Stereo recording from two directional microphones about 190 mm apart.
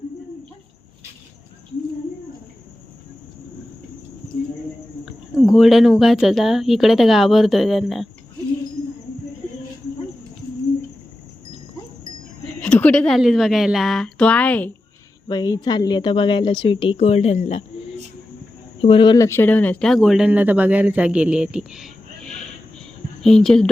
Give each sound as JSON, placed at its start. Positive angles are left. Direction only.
{"t": 5.0, "sound": "speech", "side_deg": 0}
{"t": 12.5, "sound": "speech", "side_deg": 5}
{"t": 15.3, "sound": "speech", "side_deg": 20}